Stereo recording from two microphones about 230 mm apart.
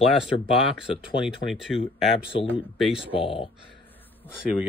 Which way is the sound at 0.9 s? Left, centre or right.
Left.